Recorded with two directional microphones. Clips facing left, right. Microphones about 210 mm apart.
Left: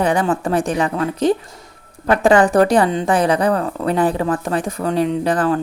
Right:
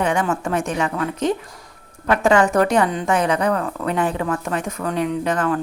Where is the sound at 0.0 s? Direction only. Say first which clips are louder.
Left 3 dB; 35° left (ahead or behind).